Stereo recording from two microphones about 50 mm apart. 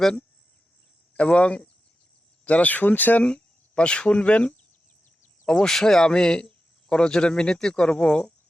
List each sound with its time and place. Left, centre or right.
1.1 s speech: left
3.2 s speech: left
5.5 s speech: centre